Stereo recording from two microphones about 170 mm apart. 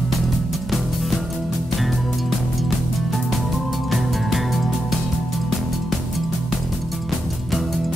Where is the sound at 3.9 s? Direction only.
Centre (ahead or behind).